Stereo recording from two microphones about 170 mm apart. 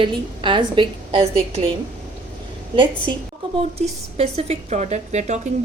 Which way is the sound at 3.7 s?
35° right (ahead or behind).